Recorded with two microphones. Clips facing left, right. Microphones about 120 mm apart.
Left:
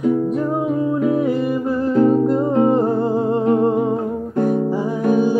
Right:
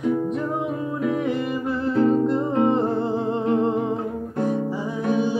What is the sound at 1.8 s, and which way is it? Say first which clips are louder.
Music: left 4 dB; 45° left (ahead or behind).